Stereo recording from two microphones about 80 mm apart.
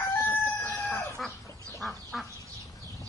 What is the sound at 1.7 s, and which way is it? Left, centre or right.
Duck, centre.